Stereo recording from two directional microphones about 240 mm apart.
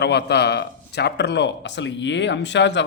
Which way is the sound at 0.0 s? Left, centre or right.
Left.